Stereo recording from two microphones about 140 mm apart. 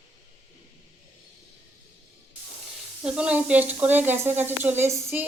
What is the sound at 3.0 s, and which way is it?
A woman's voice, 5° right (ahead or behind).